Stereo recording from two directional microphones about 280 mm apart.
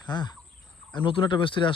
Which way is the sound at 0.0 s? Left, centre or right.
Centre.